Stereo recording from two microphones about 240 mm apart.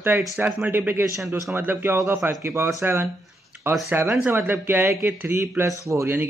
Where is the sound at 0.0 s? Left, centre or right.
Centre.